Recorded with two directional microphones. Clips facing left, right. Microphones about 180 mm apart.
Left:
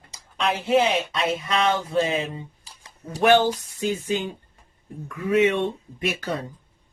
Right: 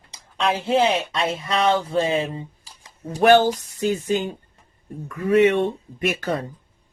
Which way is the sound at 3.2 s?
45° right (ahead or behind).